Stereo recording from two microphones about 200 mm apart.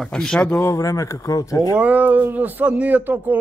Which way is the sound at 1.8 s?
5° right (ahead or behind).